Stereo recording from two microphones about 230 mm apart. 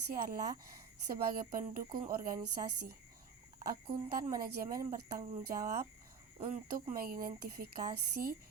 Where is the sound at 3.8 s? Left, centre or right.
Right.